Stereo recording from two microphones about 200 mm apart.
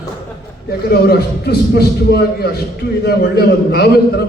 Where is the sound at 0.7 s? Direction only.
50° left (ahead or behind).